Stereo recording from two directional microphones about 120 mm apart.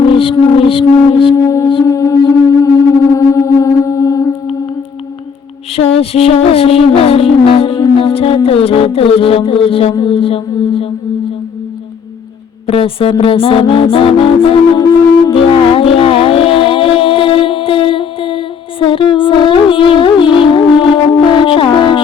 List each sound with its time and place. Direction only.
0.2 s music: 50° left (ahead or behind)
1.4 s music: 30° left (ahead or behind)
5.7 s music: 55° left (ahead or behind)
12.6 s music: 50° left (ahead or behind)
15.3 s music: 50° left (ahead or behind)